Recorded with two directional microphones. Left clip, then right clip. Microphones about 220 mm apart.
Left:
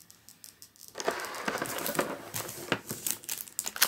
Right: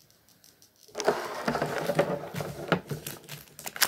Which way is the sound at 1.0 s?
30° right (ahead or behind).